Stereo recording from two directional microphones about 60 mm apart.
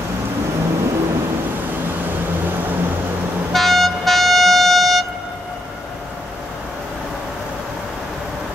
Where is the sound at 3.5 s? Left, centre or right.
Centre.